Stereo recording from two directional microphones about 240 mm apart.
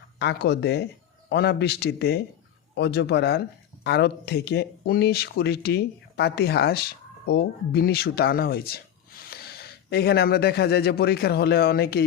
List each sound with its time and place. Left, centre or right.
0.2 s a man's voice: left